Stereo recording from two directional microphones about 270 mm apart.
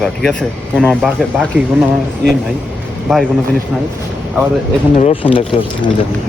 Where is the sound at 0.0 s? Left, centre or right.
Centre.